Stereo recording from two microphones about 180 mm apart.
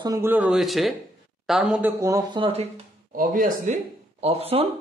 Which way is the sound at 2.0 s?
20° right (ahead or behind).